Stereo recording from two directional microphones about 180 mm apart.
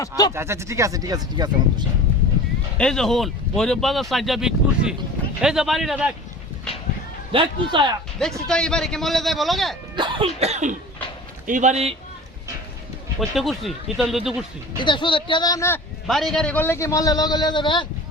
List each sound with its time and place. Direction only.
0.3 s speech: 15° right (ahead or behind)
2.7 s speech: 5° left (ahead or behind)
7.3 s speech: 25° right (ahead or behind)
8.4 s speech: 5° left (ahead or behind)
9.9 s cough: 25° right (ahead or behind)
13.1 s speech: centre (ahead or behind)
14.8 s a man's voice: 25° left (ahead or behind)
16.0 s a man's voice: centre (ahead or behind); by 17.8 s 25° left (ahead or behind)